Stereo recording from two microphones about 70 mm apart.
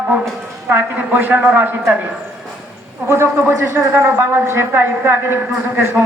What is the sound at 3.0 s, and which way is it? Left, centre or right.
A woman's voice, right.